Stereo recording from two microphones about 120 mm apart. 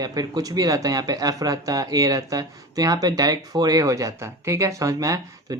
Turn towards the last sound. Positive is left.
turn(degrees=-25)  # may be behind; listen again after turning